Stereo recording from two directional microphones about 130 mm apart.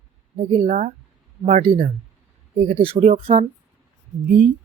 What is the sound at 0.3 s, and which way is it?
Speech, 60° right (ahead or behind).